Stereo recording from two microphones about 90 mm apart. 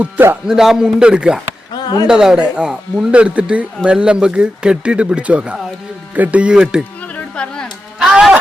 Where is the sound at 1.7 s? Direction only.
45° left (ahead or behind).